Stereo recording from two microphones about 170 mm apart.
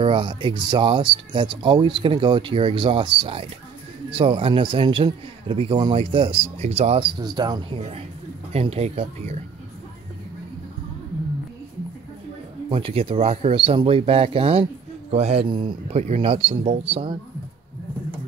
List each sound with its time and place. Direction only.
0.0 s speech: 30° right (ahead or behind)
7.2 s speech: 25° right (ahead or behind)
8.5 s speech: 35° right (ahead or behind)
12.6 s speech: 35° right (ahead or behind)